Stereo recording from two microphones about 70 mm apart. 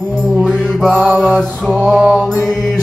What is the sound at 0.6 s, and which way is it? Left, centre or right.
Mantra, centre.